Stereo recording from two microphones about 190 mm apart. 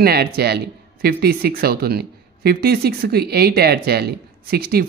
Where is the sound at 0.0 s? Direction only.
55° right (ahead or behind).